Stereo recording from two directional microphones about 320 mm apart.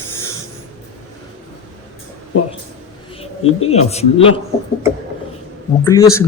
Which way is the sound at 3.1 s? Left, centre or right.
Centre.